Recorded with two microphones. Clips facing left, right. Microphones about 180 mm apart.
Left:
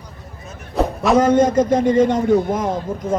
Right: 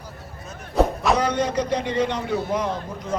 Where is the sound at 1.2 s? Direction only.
45° left (ahead or behind).